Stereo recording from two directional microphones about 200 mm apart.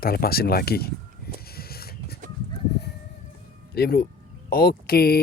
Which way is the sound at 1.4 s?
50° left (ahead or behind).